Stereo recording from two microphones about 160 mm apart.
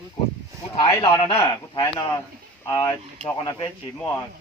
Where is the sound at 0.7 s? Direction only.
25° left (ahead or behind).